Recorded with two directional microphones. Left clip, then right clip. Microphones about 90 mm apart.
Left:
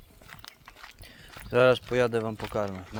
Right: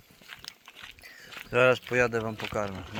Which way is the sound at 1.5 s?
90° left.